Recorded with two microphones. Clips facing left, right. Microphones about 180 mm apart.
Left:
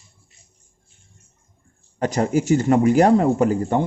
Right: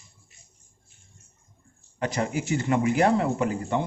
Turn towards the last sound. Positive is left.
turn(degrees=45)  # may be behind; listen again after turning